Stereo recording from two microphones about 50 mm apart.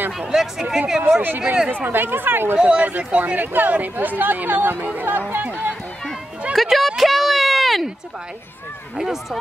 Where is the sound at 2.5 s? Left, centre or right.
Right.